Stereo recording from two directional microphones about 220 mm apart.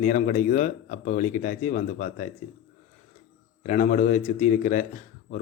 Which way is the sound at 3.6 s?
35° left (ahead or behind).